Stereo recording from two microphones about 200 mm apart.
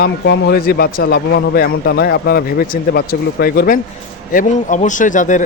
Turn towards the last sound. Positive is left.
turn(degrees=40)  # may be behind; listen again after turning